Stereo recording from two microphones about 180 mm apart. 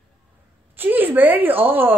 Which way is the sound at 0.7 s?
10° right (ahead or behind).